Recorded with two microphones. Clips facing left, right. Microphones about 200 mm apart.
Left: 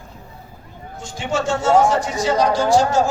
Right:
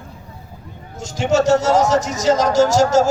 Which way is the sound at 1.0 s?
45° right (ahead or behind).